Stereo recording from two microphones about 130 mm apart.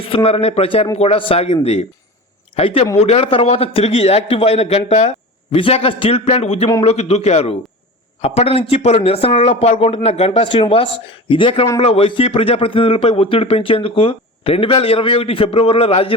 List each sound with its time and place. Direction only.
0.0 s speech: 45° left (ahead or behind)